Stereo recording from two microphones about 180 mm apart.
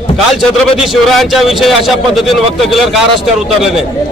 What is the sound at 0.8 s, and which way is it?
A man's voice, centre (ahead or behind).